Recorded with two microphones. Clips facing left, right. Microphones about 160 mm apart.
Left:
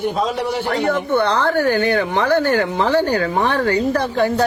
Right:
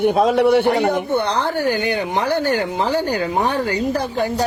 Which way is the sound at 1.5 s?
15° right (ahead or behind).